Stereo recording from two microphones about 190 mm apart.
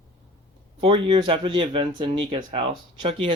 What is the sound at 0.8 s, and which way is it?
Speech, 25° right (ahead or behind).